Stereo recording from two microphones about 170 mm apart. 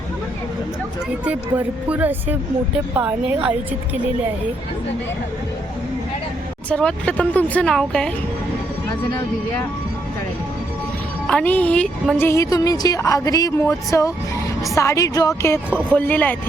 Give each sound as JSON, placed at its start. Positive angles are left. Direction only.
{"t": 1.2, "sound": "speech", "side_deg": -10}
{"t": 6.7, "sound": "speech", "side_deg": 5}
{"t": 11.3, "sound": "a woman's voice", "side_deg": 5}
{"t": 12.3, "sound": "speech", "side_deg": 20}